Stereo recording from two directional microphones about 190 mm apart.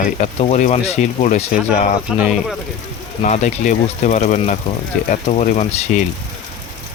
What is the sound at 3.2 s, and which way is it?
Speech, 40° left (ahead or behind).